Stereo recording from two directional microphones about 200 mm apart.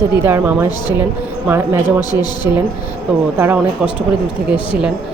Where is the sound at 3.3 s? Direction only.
10° right (ahead or behind).